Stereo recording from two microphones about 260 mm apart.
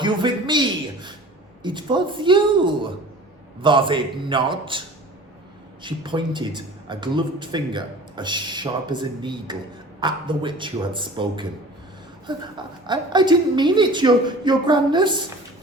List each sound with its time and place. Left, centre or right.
0.0 s a sound: centre
1.6 s a man's voice: centre
5.8 s a man's voice: centre